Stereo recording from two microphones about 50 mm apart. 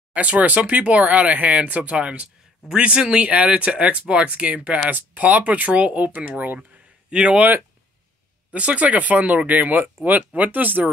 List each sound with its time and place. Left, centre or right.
0.1 s speech: right
7.1 s speech: right
8.5 s speech: right